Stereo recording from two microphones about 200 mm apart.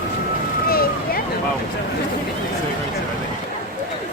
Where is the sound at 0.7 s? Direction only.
50° left (ahead or behind).